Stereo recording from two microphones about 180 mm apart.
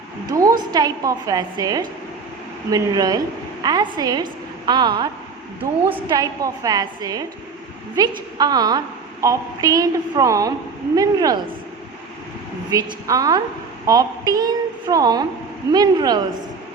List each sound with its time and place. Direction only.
0.3 s a woman's voice: 20° right (ahead or behind)
6.1 s a woman's voice: 20° right (ahead or behind)
12.7 s a woman's voice: 20° right (ahead or behind)